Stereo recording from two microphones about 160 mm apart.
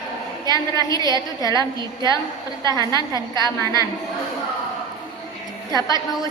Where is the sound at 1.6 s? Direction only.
25° right (ahead or behind).